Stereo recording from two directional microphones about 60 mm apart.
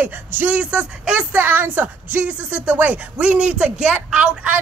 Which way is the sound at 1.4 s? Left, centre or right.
Right.